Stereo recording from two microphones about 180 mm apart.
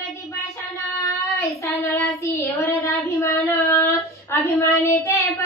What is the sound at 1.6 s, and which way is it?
Child singing, 15° left (ahead or behind).